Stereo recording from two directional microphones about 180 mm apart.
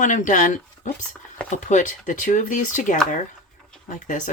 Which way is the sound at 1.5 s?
45° left (ahead or behind).